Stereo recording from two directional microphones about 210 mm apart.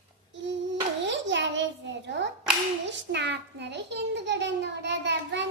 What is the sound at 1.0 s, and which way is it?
A child's voice, 60° right (ahead or behind).